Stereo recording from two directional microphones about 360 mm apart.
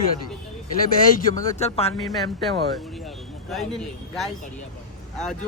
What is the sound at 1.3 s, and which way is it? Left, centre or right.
Speech, centre.